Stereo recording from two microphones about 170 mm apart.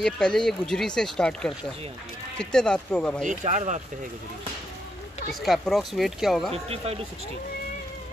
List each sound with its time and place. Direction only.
0.0 s speech: 5° left (ahead or behind)
3.3 s speech: 45° right (ahead or behind)
5.3 s speech: centre (ahead or behind)
6.5 s speech: 35° right (ahead or behind)